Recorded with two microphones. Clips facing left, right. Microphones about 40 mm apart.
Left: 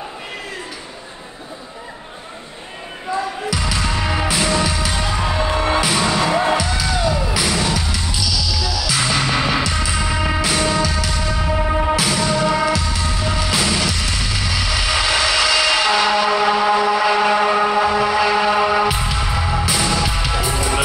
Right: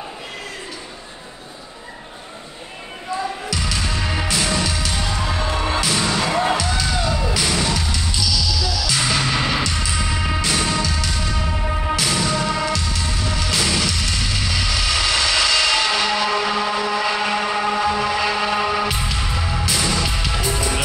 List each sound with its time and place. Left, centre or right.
3.4 s music: centre
11.5 s music: centre
11.9 s music: centre